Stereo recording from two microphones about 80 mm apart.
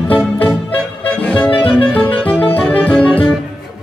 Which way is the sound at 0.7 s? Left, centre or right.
Centre.